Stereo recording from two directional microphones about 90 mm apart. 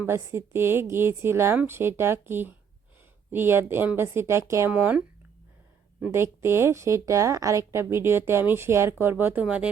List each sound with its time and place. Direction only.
0.0 s a woman's voice: 30° right (ahead or behind)
4.7 s speech: 15° right (ahead or behind)
6.1 s a woman's voice: 30° right (ahead or behind)